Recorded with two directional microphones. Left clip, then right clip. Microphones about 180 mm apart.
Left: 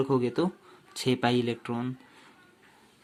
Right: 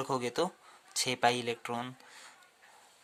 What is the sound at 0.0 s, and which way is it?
Speech, 45° right (ahead or behind).